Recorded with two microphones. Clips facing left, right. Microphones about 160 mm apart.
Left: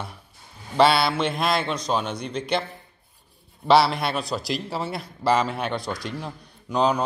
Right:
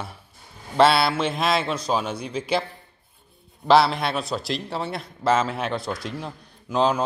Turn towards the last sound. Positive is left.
turn(degrees=0)  # may be behind; listen again after turning